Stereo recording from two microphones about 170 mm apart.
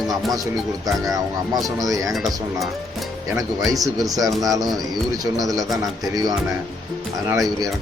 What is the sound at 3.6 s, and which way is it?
Speech, 20° right (ahead or behind).